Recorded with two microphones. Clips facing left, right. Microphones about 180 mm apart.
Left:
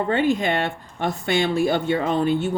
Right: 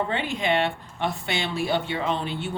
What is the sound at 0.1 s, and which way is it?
Speech, 45° left (ahead or behind).